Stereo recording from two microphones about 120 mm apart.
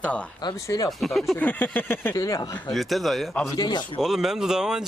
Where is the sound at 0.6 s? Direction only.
25° left (ahead or behind).